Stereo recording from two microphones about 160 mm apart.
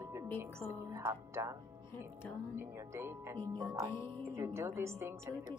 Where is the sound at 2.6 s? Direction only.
15° right (ahead or behind).